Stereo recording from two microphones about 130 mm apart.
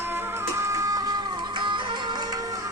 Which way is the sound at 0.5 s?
20° right (ahead or behind).